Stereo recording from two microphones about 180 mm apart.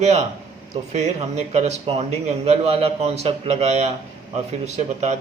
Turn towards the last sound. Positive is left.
turn(degrees=-40)  # may be behind; listen again after turning